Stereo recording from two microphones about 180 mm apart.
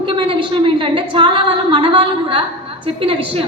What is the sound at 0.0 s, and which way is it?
A woman's voice, 30° right (ahead or behind).